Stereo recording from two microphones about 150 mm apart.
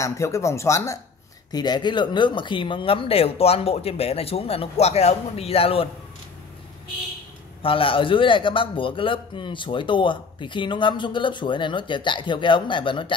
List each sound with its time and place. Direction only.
0.0 s a man's voice: 20° left (ahead or behind); by 5.9 s 40° left (ahead or behind)
7.6 s a man's voice: 35° left (ahead or behind)